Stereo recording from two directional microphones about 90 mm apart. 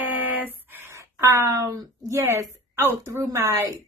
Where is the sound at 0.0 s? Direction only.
20° right (ahead or behind); by 1.9 s 45° right (ahead or behind).